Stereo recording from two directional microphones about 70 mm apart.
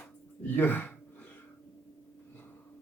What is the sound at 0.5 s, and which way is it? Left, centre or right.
Speech, left.